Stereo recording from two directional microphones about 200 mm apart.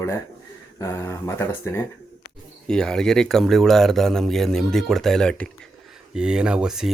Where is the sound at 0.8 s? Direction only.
10° left (ahead or behind).